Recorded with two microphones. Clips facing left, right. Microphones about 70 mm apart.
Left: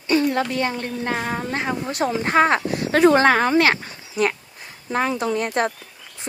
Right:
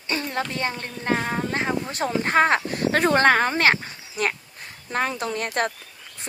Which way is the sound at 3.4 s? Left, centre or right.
Right.